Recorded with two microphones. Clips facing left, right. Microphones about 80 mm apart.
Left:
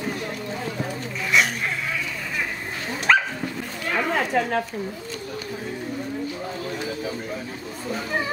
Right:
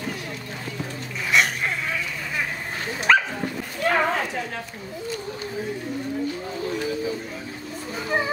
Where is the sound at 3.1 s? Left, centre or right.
Centre.